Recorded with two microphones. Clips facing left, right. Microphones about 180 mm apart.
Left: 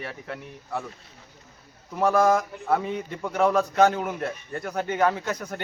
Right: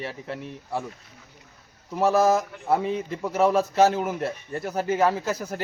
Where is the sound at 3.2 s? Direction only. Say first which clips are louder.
Right 1 dB; 5° right (ahead or behind).